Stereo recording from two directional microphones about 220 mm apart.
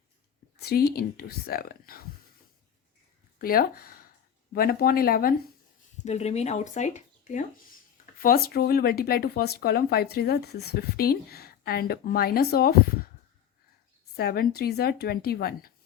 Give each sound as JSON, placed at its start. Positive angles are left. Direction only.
{"t": 0.6, "sound": "speech", "side_deg": 45}
{"t": 3.3, "sound": "speech", "side_deg": 40}
{"t": 6.0, "sound": "speech", "side_deg": 30}
{"t": 14.2, "sound": "speech", "side_deg": 45}